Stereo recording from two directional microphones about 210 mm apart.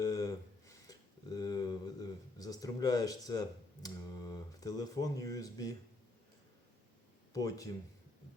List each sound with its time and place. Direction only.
0.0 s a sound: 15° left (ahead or behind)
3.8 s speech: 20° left (ahead or behind)
7.3 s speech: 15° left (ahead or behind)